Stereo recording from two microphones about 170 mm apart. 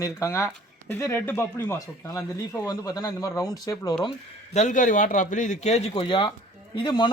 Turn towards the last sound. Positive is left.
turn(degrees=25)  # may be behind; listen again after turning